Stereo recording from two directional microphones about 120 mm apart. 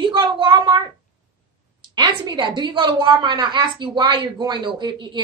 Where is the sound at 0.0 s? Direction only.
45° right (ahead or behind).